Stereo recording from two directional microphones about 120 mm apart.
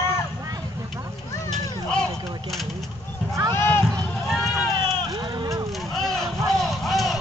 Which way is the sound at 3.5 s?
20° left (ahead or behind).